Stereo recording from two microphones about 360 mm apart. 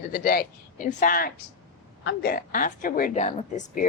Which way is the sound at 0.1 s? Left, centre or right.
Left.